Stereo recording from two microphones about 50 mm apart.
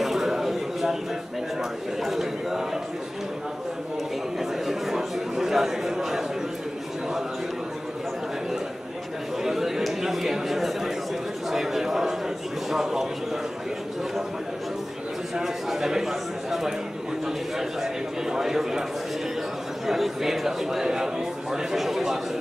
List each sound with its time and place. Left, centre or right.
0.0 s a sound: centre
1.6 s a man's voice: centre
4.4 s a man's voice: centre
9.4 s a man's voice: centre
15.3 s a man's voice: centre
18.3 s a man's voice: centre
19.9 s a man's voice: centre